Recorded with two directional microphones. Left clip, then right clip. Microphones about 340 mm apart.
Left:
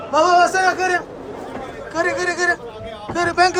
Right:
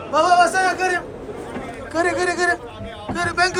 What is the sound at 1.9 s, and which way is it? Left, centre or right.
A man's voice, centre.